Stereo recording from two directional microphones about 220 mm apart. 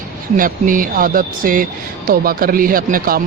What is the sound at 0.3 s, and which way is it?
Speech, 40° right (ahead or behind).